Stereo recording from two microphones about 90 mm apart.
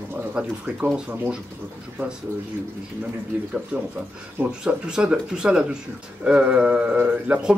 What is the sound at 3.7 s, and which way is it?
Speech, 20° right (ahead or behind).